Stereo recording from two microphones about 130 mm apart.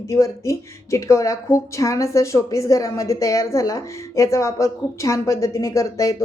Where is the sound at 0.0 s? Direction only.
25° left (ahead or behind).